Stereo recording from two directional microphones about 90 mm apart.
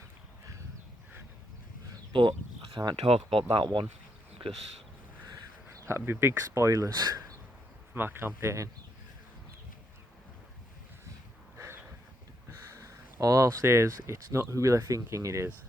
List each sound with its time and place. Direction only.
2.1 s speech: 65° right (ahead or behind); by 3.4 s 85° right
3.5 s speech: 60° right (ahead or behind)
5.6 s speech: 25° right (ahead or behind)
6.9 s speech: 50° right (ahead or behind)
7.9 s speech: 25° right (ahead or behind)
11.5 s a sound: 30° right (ahead or behind)
12.5 s speech: 35° right (ahead or behind)